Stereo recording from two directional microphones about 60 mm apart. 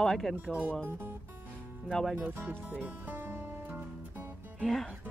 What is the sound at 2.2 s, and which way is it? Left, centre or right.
Speech, right.